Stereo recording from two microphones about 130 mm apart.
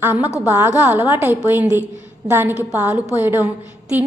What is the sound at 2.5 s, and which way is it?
Speech, 20° left (ahead or behind).